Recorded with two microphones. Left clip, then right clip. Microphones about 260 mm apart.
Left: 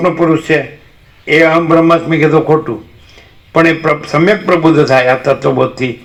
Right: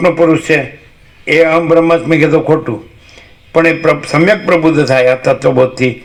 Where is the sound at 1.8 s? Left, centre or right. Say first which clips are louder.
Even; right.